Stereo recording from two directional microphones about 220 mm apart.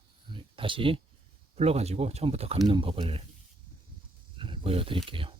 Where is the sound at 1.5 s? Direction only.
30° right (ahead or behind).